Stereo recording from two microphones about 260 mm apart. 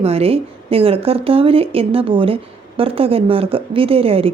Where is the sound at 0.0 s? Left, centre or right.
Right.